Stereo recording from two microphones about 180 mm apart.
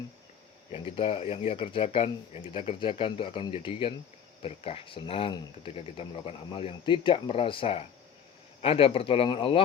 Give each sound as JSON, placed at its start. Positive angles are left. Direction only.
{"t": 0.7, "sound": "a man's voice", "side_deg": 30}